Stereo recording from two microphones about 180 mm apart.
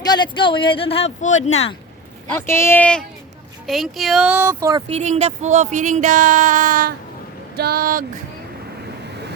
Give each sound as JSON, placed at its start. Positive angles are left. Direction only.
{"t": 0.0, "sound": "speech", "side_deg": 25}
{"t": 2.3, "sound": "speech", "side_deg": 15}
{"t": 4.9, "sound": "speech", "side_deg": -35}
{"t": 7.5, "sound": "speech", "side_deg": -60}